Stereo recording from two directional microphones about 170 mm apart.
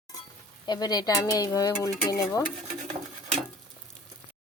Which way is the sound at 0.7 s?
25° left (ahead or behind).